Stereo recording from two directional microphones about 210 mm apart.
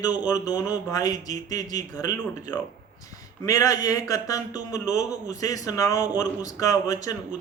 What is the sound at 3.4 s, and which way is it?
Speech, 15° left (ahead or behind).